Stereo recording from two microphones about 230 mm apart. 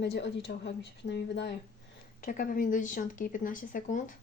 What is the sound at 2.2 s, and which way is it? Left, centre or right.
Speech, left.